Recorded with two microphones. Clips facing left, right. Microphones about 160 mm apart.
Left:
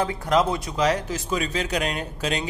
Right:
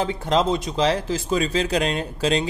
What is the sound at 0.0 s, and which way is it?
Speech, 25° right (ahead or behind).